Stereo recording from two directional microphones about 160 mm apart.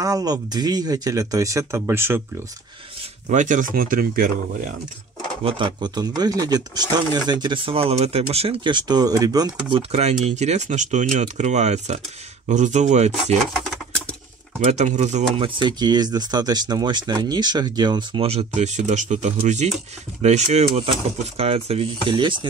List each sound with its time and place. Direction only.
0.0 s speech: 25° right (ahead or behind)
3.3 s speech: 50° right (ahead or behind)
5.4 s speech: 35° right (ahead or behind)
9.8 s speech: 40° right (ahead or behind)
14.6 s speech: 45° right (ahead or behind)